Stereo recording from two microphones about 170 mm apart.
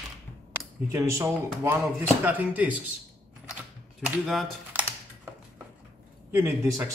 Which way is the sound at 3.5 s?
5° right (ahead or behind).